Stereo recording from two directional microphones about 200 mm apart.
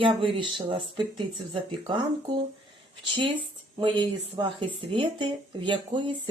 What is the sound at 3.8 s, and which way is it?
Speech, 25° right (ahead or behind).